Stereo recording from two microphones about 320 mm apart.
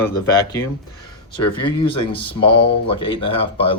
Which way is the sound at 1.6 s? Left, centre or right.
Centre.